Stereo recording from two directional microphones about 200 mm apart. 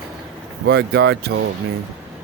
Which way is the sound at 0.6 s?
55° right (ahead or behind).